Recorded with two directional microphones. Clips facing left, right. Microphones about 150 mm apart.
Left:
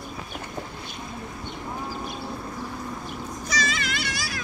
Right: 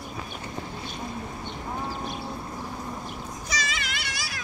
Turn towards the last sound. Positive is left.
turn(degrees=-20)  # may be behind; listen again after turning